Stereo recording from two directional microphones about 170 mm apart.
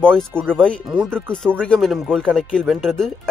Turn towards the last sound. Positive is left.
turn(degrees=0)  # may be behind; listen again after turning